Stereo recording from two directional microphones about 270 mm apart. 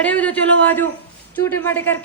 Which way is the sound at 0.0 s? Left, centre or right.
Centre.